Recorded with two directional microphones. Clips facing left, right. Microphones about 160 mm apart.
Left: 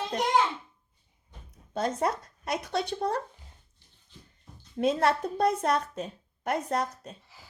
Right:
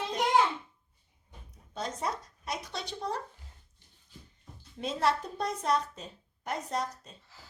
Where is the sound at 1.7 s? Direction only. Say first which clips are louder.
Left 7 dB; 55° left (ahead or behind).